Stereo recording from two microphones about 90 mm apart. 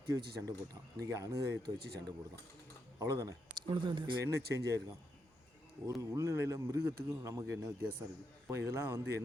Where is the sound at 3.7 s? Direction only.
65° right (ahead or behind).